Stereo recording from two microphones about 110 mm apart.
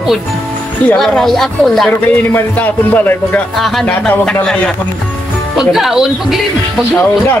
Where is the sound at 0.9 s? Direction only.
Centre (ahead or behind).